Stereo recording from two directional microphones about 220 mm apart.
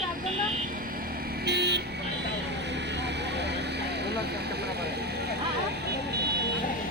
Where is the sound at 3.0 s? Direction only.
50° right (ahead or behind).